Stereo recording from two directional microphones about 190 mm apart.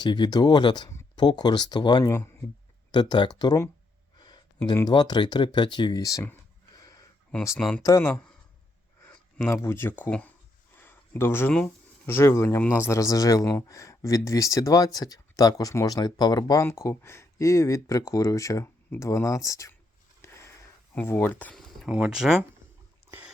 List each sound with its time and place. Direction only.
0.0 s speech: 25° left (ahead or behind)
6.7 s a sound: 20° left (ahead or behind)
7.8 s speech: 15° left (ahead or behind)
20.2 s sniff: 15° left (ahead or behind)
20.9 s speech: 10° left (ahead or behind)